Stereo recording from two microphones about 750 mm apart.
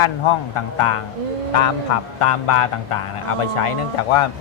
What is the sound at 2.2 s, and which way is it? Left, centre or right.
Speech, left.